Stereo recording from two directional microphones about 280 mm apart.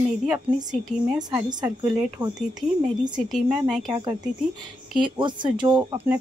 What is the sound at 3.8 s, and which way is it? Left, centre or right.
Speech, centre.